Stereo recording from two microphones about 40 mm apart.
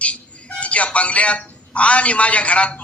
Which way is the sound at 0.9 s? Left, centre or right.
Left.